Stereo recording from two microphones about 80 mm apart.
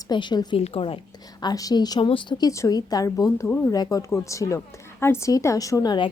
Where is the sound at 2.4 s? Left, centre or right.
Left.